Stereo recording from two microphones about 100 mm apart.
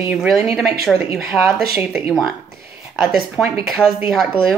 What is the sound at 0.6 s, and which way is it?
Speech, 5° right (ahead or behind).